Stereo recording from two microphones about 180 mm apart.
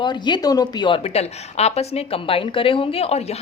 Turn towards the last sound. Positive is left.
turn(degrees=35)  # may be behind; listen again after turning